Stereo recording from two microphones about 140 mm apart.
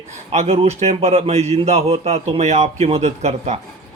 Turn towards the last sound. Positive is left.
turn(degrees=-50)  # may be behind; listen again after turning